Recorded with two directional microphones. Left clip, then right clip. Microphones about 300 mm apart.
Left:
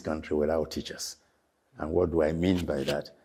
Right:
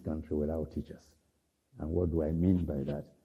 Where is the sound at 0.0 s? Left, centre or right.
Centre.